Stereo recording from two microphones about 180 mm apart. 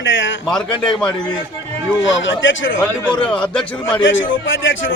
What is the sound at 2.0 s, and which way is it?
Speech, 90° left.